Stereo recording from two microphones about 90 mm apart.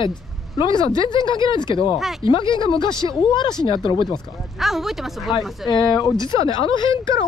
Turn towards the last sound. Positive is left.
turn(degrees=65)  # may be behind; listen again after turning